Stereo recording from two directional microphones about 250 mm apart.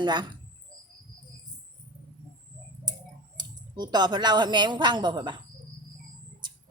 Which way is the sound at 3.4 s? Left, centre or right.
Centre.